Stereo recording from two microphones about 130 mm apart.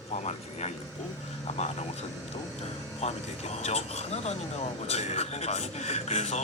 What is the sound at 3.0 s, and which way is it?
Speech, 55° left (ahead or behind).